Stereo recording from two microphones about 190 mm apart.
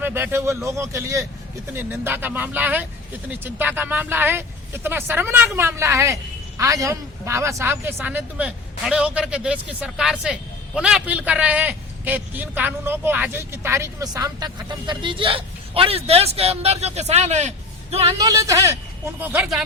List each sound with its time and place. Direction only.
0.0 s a man's voice: 10° right (ahead or behind); by 17.5 s 35° right (ahead or behind)
18.2 s a man's voice: 20° right (ahead or behind)